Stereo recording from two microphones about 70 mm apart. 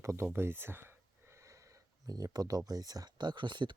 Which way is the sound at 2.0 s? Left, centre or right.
Right.